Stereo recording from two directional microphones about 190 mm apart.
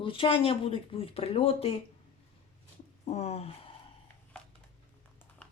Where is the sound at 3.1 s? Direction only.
35° left (ahead or behind).